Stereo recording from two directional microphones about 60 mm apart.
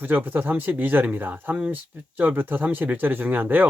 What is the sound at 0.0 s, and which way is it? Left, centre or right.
Speech, right.